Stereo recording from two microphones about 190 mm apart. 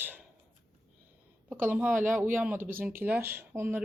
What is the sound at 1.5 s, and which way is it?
Speech, 10° right (ahead or behind).